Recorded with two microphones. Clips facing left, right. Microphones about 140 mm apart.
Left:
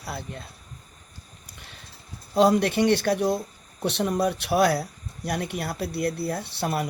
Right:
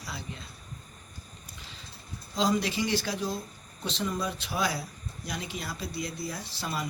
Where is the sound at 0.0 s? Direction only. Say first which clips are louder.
Left 5 dB; 60° left (ahead or behind).